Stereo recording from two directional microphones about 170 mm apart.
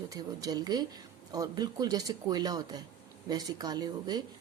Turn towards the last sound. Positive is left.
turn(degrees=-25)  # may be behind; listen again after turning